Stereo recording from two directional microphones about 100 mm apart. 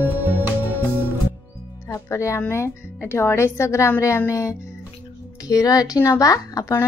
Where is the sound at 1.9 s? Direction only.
30° left (ahead or behind).